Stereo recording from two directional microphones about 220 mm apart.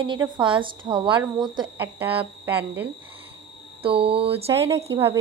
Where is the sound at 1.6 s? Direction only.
10° right (ahead or behind).